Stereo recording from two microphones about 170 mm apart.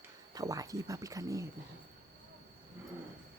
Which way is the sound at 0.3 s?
20° right (ahead or behind).